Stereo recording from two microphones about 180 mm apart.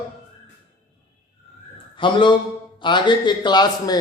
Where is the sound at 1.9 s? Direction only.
25° left (ahead or behind).